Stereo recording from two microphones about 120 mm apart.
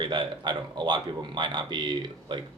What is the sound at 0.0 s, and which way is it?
Speech, 40° right (ahead or behind).